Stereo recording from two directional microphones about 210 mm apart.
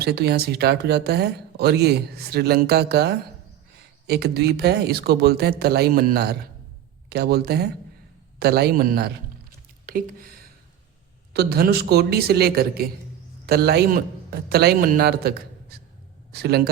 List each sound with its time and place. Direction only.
0.0 s speech: 50° right (ahead or behind)
9.8 s a sound: 40° right (ahead or behind)
11.3 s a man's voice: 45° right (ahead or behind)